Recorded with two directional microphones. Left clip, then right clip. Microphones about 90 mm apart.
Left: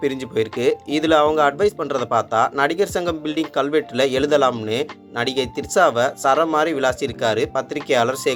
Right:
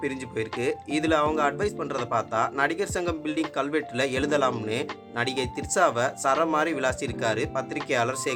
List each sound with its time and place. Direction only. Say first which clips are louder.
0.0 s speech: left 9 dB; 60° left (ahead or behind)